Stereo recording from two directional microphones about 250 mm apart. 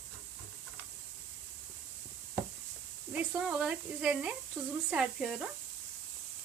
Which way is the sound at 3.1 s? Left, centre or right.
Centre.